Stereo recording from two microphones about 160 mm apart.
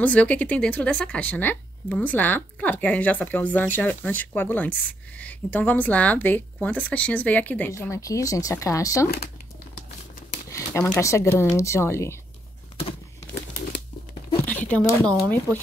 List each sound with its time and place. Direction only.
0.0 s speech: 10° left (ahead or behind)
10.5 s speech: 15° left (ahead or behind)
14.4 s speech: 10° left (ahead or behind)